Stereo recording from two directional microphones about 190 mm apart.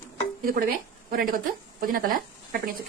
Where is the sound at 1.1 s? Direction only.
50° right (ahead or behind).